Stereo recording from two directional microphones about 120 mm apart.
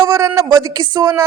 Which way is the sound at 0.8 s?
35° right (ahead or behind).